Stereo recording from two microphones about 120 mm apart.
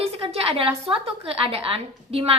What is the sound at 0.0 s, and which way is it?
A woman's voice, 55° right (ahead or behind).